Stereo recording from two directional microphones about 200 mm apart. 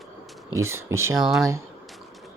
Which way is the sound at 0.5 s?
15° right (ahead or behind).